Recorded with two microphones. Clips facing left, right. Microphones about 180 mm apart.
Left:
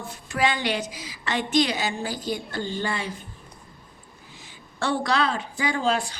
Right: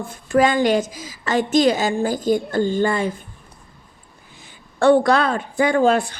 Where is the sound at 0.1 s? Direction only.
50° right (ahead or behind).